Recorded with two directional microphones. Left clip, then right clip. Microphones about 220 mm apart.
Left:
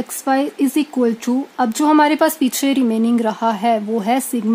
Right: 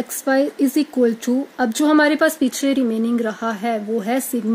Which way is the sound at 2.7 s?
50° left (ahead or behind).